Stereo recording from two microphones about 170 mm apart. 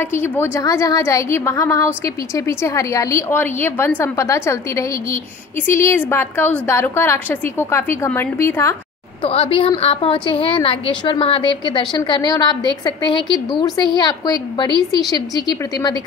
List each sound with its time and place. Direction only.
0.0 s a woman's voice: 15° left (ahead or behind)
9.2 s a woman's voice: 35° left (ahead or behind)